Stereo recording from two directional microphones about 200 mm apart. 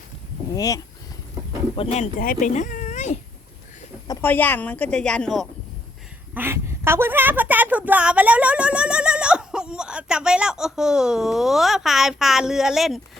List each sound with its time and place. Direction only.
0.5 s speech: 15° left (ahead or behind)
1.7 s speech: 30° left (ahead or behind)
4.0 s speech: 15° left (ahead or behind)
6.3 s a woman's voice: 10° right (ahead or behind)